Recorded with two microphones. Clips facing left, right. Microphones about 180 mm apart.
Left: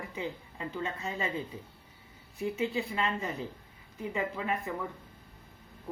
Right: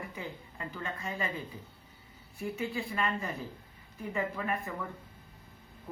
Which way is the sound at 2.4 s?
20° left (ahead or behind).